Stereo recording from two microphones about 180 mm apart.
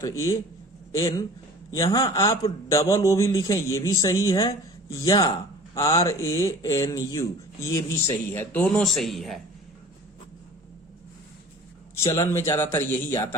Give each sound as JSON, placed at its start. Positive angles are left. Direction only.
{"t": 0.0, "sound": "a man's voice", "side_deg": 15}
{"t": 12.0, "sound": "a man's voice", "side_deg": 20}